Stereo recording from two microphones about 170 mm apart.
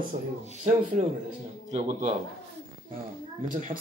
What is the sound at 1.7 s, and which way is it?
Speech, 40° right (ahead or behind).